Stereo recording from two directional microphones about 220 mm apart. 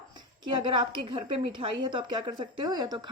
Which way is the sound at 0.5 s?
20° right (ahead or behind).